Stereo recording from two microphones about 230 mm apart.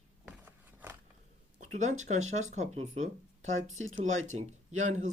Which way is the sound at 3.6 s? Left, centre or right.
Right.